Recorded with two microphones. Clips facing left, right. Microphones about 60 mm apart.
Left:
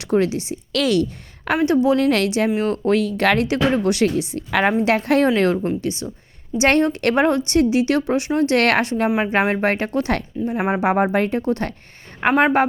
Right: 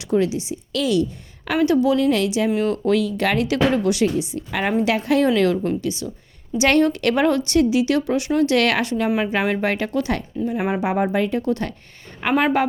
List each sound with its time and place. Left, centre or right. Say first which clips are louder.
0.0 s speech: left 1 dB; left
1.6 s a woman's voice: left 1 dB; left
2.0 s speech: left 1 dB; left
2.6 s speech: left 1 dB; left
3.4 s a woman's voice: even; left
3.8 s speech: left 1 dB; left
5.3 s a woman's voice: even; left
9.0 s speech: left 1 dB; centre
9.3 s a woman's voice: left 2 dB; left
10.3 s speech: even; centre
10.8 s a woman's voice: left 4 dB; left